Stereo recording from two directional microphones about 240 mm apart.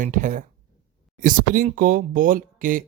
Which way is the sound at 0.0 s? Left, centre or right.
Right.